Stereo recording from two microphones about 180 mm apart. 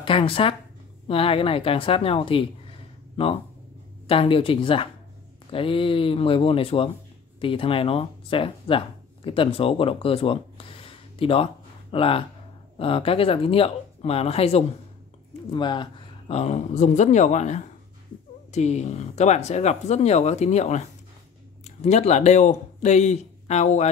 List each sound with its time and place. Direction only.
0.0 s speech: 30° left (ahead or behind)
4.1 s speech: 30° left (ahead or behind)